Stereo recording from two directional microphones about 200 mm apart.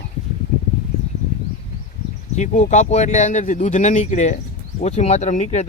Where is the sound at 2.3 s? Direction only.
35° left (ahead or behind).